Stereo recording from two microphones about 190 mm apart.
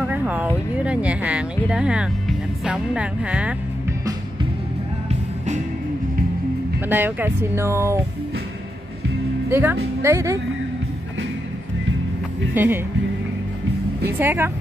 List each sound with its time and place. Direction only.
0.0 s speech: 5° right (ahead or behind)
6.9 s speech: 10° right (ahead or behind)
9.5 s speech: 10° right (ahead or behind)
12.5 s speech: 10° right (ahead or behind)
14.0 s speech: 10° right (ahead or behind)